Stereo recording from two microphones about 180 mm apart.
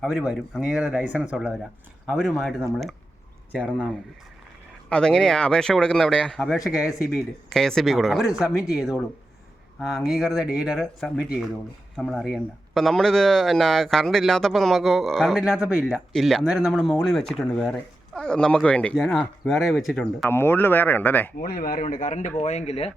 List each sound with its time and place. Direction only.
0.0 s speech: 5° right (ahead or behind)
3.7 s speech: 5° right (ahead or behind)
4.9 s speech: 5° left (ahead or behind)
20.2 s speech: 10° left (ahead or behind)
21.3 s speech: 55° left (ahead or behind); by 22.9 s 35° left (ahead or behind)